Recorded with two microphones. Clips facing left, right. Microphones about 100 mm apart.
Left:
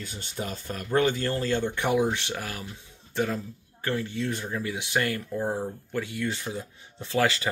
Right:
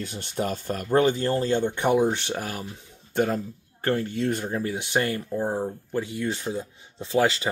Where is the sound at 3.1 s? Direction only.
50° right (ahead or behind).